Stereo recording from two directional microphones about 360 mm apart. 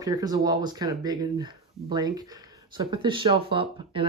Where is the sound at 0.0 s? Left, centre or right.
Centre.